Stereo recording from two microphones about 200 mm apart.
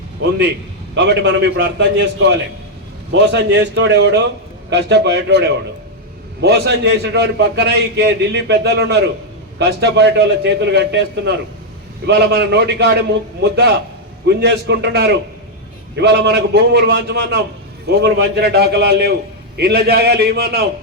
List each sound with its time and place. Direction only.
0.2 s a man's voice: 60° right (ahead or behind)